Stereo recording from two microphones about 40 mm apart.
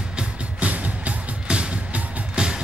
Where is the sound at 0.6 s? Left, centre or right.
Right.